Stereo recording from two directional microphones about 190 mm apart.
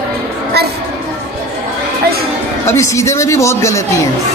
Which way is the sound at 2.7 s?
15° left (ahead or behind).